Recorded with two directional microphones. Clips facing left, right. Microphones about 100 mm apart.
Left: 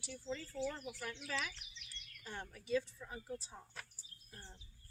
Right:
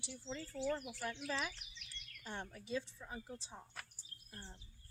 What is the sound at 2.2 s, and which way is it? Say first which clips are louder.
Speech: even; 25° right (ahead or behind).